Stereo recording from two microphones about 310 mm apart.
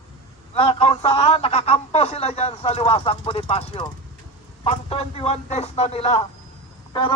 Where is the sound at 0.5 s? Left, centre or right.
Centre.